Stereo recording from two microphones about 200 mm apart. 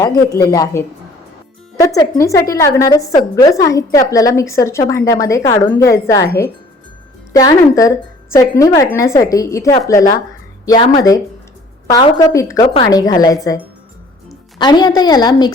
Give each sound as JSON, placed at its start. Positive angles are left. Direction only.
{"t": 0.0, "sound": "a woman's voice", "side_deg": 20}
{"t": 14.6, "sound": "a woman's voice", "side_deg": 20}